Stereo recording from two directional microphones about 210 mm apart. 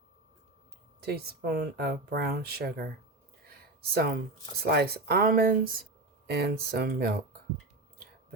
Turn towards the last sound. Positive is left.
turn(degrees=-50)  # may be behind; listen again after turning